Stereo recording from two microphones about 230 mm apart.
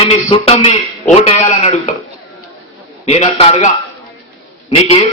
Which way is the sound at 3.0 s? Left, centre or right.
Left.